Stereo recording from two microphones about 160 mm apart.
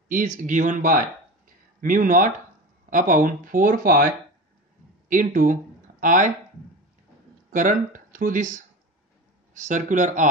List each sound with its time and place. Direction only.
0.4 s speech: 50° right (ahead or behind)
7.5 s speech: 55° right (ahead or behind)